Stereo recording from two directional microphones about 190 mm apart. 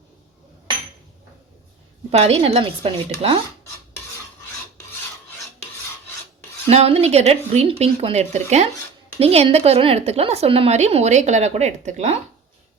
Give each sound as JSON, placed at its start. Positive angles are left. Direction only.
{"t": 2.0, "sound": "a woman's voice", "side_deg": -35}
{"t": 6.7, "sound": "a woman's voice", "side_deg": -30}